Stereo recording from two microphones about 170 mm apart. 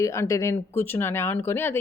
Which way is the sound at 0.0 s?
15° left (ahead or behind).